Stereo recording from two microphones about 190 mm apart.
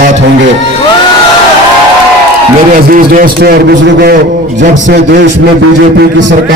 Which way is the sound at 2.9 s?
50° right (ahead or behind).